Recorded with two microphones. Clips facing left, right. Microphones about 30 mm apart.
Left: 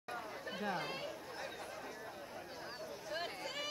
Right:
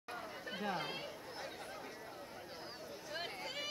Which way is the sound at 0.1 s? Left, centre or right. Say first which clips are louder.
Left 1 dB; centre.